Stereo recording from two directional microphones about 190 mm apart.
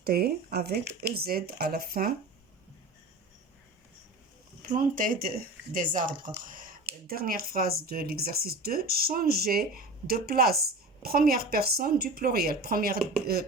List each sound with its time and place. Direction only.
0.0 s speech: 50° right (ahead or behind)
4.6 s speech: 45° right (ahead or behind)